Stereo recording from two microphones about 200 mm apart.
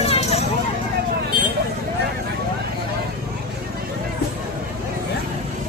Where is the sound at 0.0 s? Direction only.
30° left (ahead or behind).